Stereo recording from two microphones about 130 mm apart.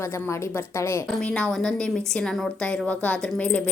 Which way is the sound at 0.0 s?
20° left (ahead or behind).